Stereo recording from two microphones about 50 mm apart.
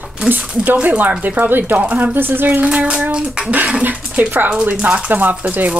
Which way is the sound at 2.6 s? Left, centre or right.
Right.